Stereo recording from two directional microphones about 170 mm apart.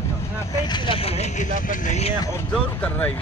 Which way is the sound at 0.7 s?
30° left (ahead or behind).